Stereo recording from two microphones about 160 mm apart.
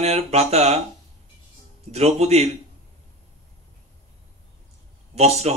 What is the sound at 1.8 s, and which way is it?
Speech, 40° right (ahead or behind).